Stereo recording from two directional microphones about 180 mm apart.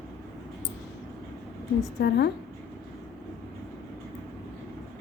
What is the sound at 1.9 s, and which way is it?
Speech, 65° left (ahead or behind).